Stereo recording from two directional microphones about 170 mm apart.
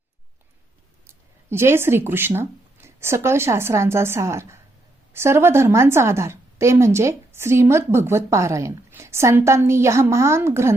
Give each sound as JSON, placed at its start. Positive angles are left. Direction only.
{"t": 1.5, "sound": "a woman's voice", "side_deg": -15}